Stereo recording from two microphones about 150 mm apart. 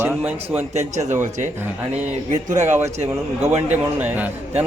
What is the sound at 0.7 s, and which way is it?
Speech, 50° right (ahead or behind).